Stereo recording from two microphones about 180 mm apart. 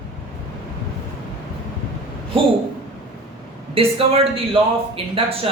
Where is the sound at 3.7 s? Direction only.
30° right (ahead or behind).